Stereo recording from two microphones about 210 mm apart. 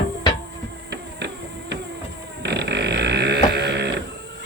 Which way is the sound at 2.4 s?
55° right (ahead or behind).